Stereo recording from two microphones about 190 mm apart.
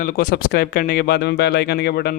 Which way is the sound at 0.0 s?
50° left (ahead or behind).